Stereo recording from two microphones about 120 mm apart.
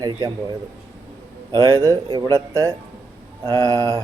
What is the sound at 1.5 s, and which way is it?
Speech, 25° right (ahead or behind).